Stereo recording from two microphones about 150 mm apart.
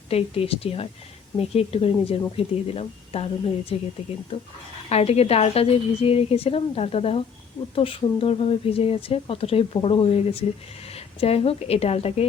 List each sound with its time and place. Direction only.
0.1 s speech: 40° left (ahead or behind)
4.9 s a woman's voice: 45° left (ahead or behind)